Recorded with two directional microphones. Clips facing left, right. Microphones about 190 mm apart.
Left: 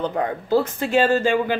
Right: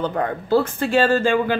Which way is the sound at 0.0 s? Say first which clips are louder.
Right 1 dB; 15° left (ahead or behind).